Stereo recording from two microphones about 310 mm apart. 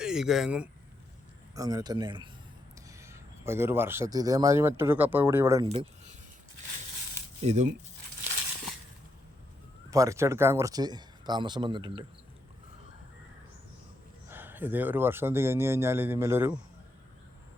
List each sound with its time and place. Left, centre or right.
0.0 s a man's voice: centre
7.4 s speech: right
9.9 s speech: centre
14.3 s speech: centre